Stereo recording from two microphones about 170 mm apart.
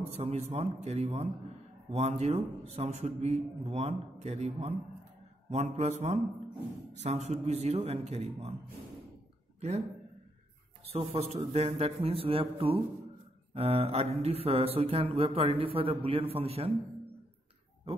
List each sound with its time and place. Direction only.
0.1 s a man's voice: 40° right (ahead or behind)
9.6 s speech: 40° right (ahead or behind)
10.9 s a man's voice: 35° right (ahead or behind)